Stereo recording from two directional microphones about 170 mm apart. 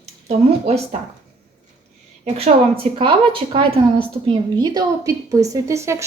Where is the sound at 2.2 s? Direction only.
35° right (ahead or behind).